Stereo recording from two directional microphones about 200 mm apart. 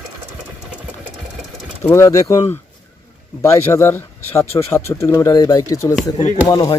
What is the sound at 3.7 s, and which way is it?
Speech, 10° left (ahead or behind).